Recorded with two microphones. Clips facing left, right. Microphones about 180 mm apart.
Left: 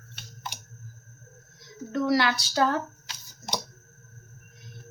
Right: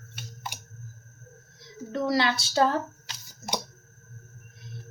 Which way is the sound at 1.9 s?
25° right (ahead or behind).